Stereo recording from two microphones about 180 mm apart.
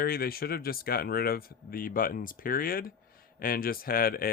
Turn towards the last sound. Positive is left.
turn(degrees=55)  # may be behind; listen again after turning